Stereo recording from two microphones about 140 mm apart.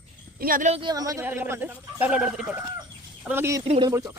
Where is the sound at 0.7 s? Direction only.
35° right (ahead or behind).